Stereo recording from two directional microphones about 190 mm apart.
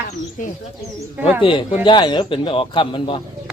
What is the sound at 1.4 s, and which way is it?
Speech, 25° left (ahead or behind).